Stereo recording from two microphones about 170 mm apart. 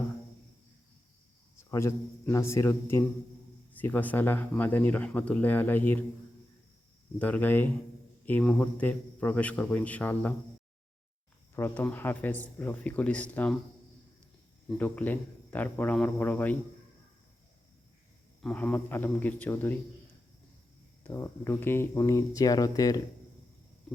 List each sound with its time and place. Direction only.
1.7 s speech: 15° left (ahead or behind)
7.2 s speech: 10° left (ahead or behind)
11.5 s speech: 15° left (ahead or behind)
14.8 s speech: 10° left (ahead or behind)
18.4 s speech: 10° left (ahead or behind)
21.0 s speech: 15° left (ahead or behind)